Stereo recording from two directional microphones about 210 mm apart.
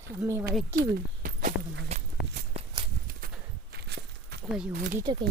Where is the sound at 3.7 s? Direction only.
55° right (ahead or behind).